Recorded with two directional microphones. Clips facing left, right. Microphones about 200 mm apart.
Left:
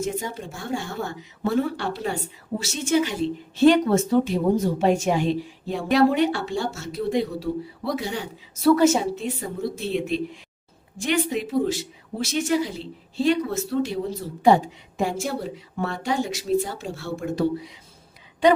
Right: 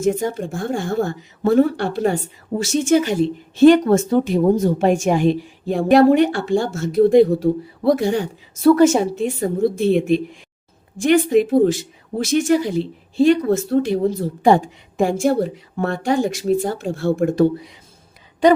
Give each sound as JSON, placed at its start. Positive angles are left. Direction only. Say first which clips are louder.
{"t": 0.0, "sound": "speech", "louder": "right 9 dB", "side_deg": -50}